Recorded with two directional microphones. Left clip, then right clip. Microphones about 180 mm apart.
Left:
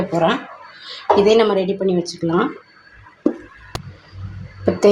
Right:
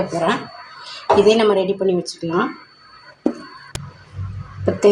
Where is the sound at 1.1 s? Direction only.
15° left (ahead or behind).